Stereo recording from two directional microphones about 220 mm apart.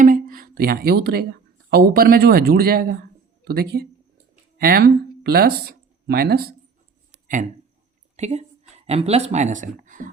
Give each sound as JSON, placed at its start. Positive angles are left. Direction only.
{"t": 0.0, "sound": "speech", "side_deg": -40}
{"t": 8.1, "sound": "speech", "side_deg": -30}